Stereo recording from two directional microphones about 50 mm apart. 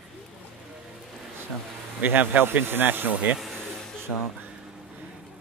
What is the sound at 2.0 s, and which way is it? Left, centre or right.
Speech, right.